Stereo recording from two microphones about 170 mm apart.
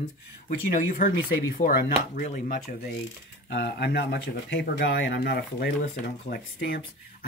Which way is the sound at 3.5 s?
80° left.